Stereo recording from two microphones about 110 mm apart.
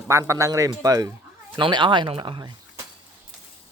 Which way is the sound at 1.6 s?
45° right (ahead or behind).